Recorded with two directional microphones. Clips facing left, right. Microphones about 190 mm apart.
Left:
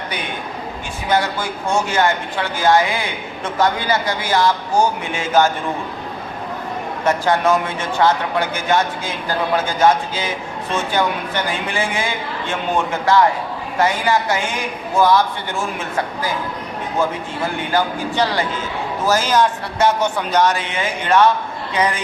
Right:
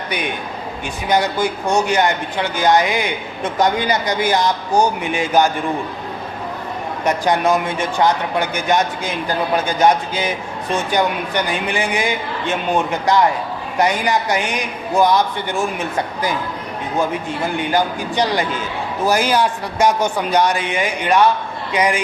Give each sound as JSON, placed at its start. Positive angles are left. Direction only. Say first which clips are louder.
{"t": 1.1, "sound": "speech", "louder": "right 2 dB", "side_deg": -15}
{"t": 7.0, "sound": "speech", "louder": "even", "side_deg": -15}
{"t": 17.7, "sound": "speech", "louder": "left 1 dB", "side_deg": -15}